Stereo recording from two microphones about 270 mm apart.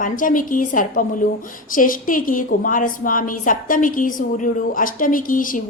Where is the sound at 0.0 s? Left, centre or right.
Left.